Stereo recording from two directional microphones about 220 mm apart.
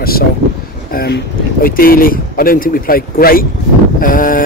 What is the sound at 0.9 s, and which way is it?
Speech, 45° left (ahead or behind).